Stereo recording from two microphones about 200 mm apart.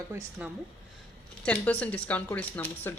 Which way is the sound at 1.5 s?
5° left (ahead or behind).